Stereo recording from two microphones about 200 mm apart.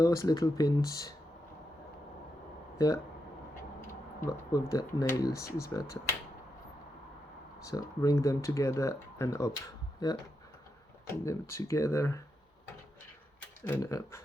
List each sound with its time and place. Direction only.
0.0 s speech: 15° left (ahead or behind)
2.7 s speech: 15° left (ahead or behind)
4.2 s speech: 15° left (ahead or behind)
7.6 s speech: 15° left (ahead or behind)
11.1 s speech: 15° left (ahead or behind)
13.7 s speech: 10° left (ahead or behind)